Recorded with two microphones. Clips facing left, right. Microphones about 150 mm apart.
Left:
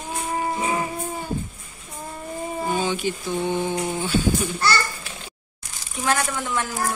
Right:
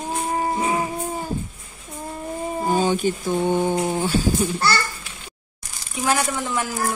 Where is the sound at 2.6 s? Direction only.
40° right (ahead or behind).